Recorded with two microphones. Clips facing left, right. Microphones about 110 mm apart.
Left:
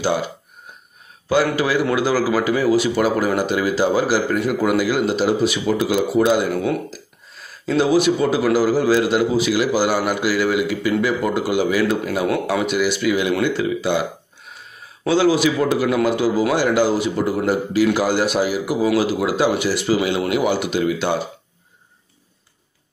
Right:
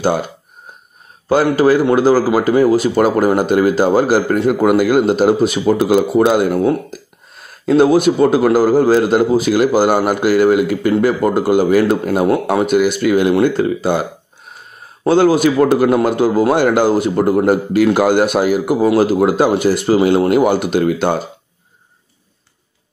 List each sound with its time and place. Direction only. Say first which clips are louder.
0.0 s speech: right 4 dB; 50° right (ahead or behind)
1.3 s speech: right 6 dB; 45° right (ahead or behind)
15.0 s a man's voice: right 5 dB; 50° right (ahead or behind)